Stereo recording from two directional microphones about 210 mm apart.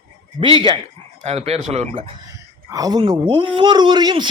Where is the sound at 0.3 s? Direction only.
25° right (ahead or behind).